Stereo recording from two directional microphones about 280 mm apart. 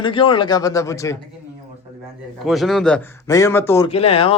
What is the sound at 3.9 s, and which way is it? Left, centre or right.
Speech, left.